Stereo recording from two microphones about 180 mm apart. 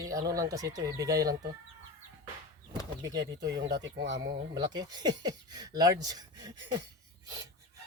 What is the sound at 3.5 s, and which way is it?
Speech, 85° right.